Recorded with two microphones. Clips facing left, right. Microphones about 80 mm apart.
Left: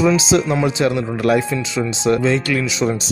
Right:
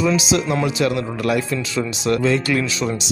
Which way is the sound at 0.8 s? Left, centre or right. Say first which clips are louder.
Left 2 dB; left.